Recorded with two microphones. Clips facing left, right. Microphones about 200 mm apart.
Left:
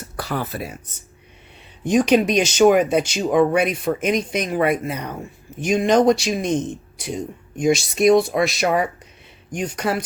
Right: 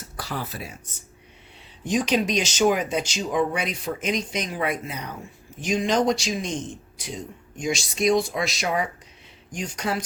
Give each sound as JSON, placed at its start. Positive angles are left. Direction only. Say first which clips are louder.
{"t": 0.2, "sound": "speech", "louder": "left 6 dB", "side_deg": 60}
{"t": 1.9, "sound": "speech", "louder": "left 7 dB", "side_deg": 60}
{"t": 7.6, "sound": "speech", "louder": "left 8 dB", "side_deg": 60}